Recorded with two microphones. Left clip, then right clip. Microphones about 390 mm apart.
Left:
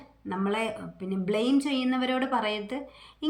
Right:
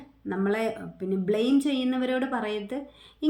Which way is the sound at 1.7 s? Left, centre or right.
Left.